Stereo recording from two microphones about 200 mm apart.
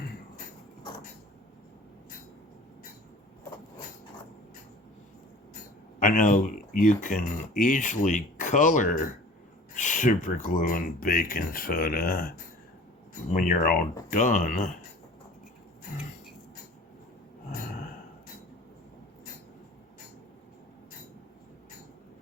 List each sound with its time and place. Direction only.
6.0 s speech: 40° left (ahead or behind)
13.3 s speech: 40° left (ahead or behind)